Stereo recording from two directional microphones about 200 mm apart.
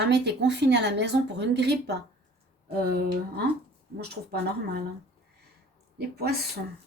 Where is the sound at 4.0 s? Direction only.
50° right (ahead or behind).